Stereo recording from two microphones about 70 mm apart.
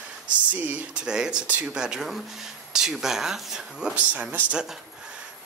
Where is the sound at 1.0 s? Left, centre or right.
Centre.